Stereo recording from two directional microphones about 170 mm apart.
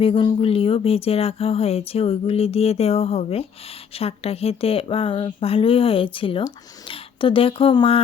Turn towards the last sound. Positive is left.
turn(degrees=30)  # may be behind; listen again after turning